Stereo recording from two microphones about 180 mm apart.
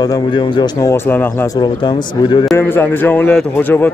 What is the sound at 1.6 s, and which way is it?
Speech, 25° left (ahead or behind).